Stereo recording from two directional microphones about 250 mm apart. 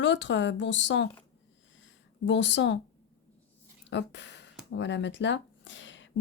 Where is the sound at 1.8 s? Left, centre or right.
Left.